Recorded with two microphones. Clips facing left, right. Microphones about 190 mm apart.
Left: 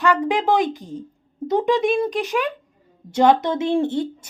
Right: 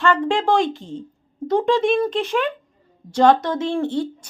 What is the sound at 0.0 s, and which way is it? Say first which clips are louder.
A woman's voice: even; 15° left (ahead or behind).